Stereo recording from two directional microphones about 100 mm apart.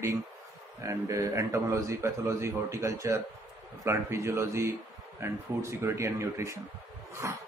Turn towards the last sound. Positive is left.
turn(degrees=-30)  # may be behind; listen again after turning